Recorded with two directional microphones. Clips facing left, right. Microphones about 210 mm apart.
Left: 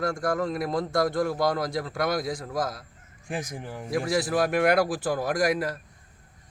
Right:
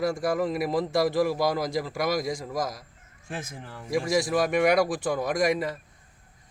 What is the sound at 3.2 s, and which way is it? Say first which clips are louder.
Speech: left 4 dB; 15° left (ahead or behind).